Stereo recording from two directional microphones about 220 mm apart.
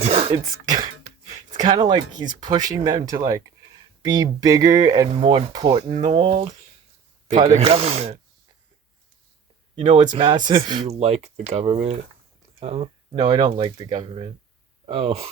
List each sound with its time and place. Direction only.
0.0 s speech: 25° right (ahead or behind)
7.3 s speech: 25° right (ahead or behind)
9.8 s speech: 20° right (ahead or behind)